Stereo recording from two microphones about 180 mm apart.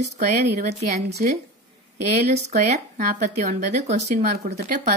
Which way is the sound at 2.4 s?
40° right (ahead or behind).